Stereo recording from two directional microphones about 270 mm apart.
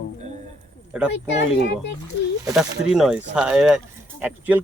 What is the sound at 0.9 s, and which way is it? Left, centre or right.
Speech, centre.